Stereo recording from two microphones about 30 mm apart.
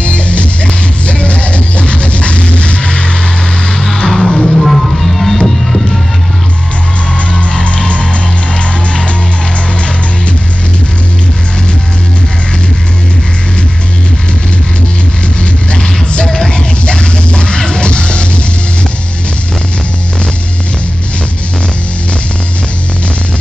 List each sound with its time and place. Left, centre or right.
0.0 s music: left
2.8 s vehicle: left
3.6 s music: centre
4.6 s music: centre
7.6 s music: left
16.4 s music: left